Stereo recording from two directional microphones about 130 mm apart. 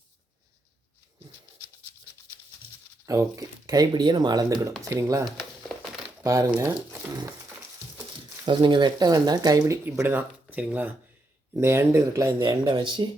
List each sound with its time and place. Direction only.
3.1 s speech: 25° right (ahead or behind)
6.2 s speech: 20° right (ahead or behind)
8.4 s speech: 40° right (ahead or behind)
10.0 s speech: 15° right (ahead or behind)
12.4 s speech: 35° right (ahead or behind)